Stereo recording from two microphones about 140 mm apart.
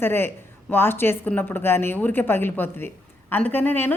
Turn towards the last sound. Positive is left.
turn(degrees=15)  # may be behind; listen again after turning